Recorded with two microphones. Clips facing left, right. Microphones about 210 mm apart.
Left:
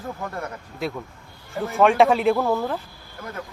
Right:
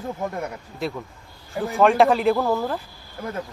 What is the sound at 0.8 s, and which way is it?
Speech, centre (ahead or behind).